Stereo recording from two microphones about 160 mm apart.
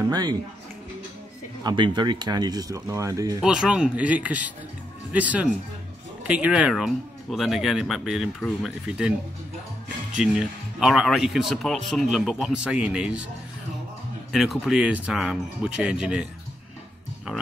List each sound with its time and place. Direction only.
0.1 s speech: 25° right (ahead or behind)
1.6 s speech: 25° right (ahead or behind)
3.4 s speech: 5° right (ahead or behind)
10.1 s speech: 5° right (ahead or behind)
14.3 s speech: centre (ahead or behind)